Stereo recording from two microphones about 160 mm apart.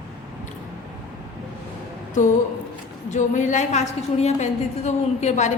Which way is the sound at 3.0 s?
50° left (ahead or behind).